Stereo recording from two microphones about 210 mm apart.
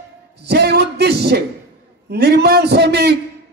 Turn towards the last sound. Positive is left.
turn(degrees=-50)  # may be behind; listen again after turning